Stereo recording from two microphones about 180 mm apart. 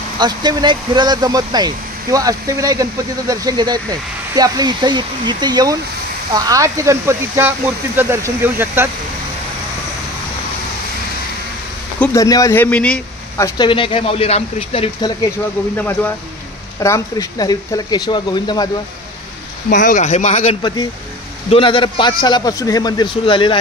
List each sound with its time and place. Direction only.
0.2 s speech: 25° right (ahead or behind)
12.0 s speech: 15° left (ahead or behind)
13.4 s speech: 25° left (ahead or behind)
15.8 s a man's voice: 10° left (ahead or behind); by 18.7 s 25° left (ahead or behind)
19.7 s speech: 45° left (ahead or behind)
20.6 s a man's voice: 25° left (ahead or behind)